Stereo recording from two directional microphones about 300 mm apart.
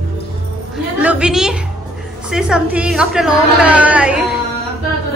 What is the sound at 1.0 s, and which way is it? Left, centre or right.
A woman's voice, centre.